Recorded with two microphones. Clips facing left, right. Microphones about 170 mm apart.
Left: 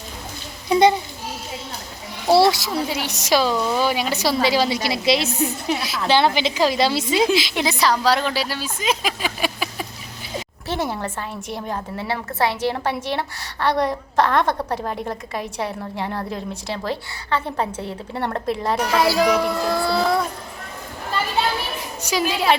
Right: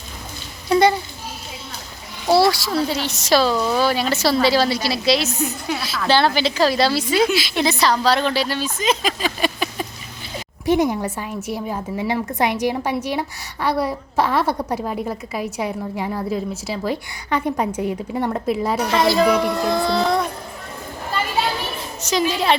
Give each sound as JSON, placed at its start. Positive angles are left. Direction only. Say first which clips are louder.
{"t": 0.7, "sound": "a sound", "louder": "even", "side_deg": 20}
{"t": 2.4, "sound": "a woman's voice", "louder": "even", "side_deg": 20}
{"t": 10.7, "sound": "a woman's voice", "louder": "right 7 dB", "side_deg": -15}
{"t": 18.9, "sound": "a child's voice", "louder": "right 1 dB", "side_deg": 5}
{"t": 22.0, "sound": "a woman's voice", "louder": "right 1 dB", "side_deg": 5}